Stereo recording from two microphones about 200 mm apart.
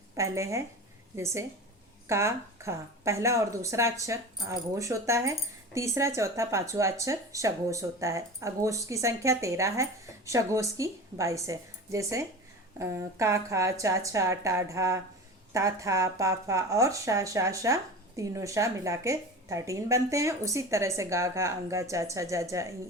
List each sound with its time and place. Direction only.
0.2 s a woman's voice: 15° right (ahead or behind)